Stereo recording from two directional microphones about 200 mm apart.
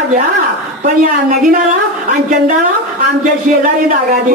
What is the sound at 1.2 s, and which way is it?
Speech, 40° right (ahead or behind).